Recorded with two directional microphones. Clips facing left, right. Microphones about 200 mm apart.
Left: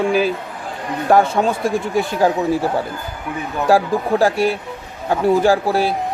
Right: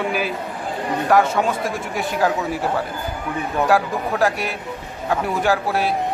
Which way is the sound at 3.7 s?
30° left (ahead or behind).